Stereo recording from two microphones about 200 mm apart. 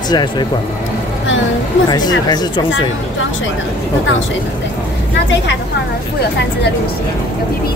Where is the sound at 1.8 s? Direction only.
20° left (ahead or behind).